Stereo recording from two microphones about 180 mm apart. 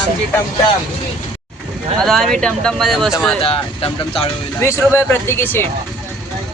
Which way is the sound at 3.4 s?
30° left (ahead or behind).